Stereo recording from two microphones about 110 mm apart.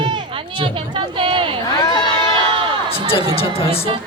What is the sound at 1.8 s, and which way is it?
Speech, 35° left (ahead or behind).